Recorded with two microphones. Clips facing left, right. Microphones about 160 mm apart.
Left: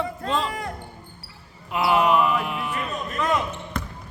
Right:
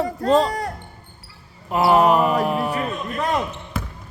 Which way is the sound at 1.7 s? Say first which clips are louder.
Right 4 dB; 40° right (ahead or behind).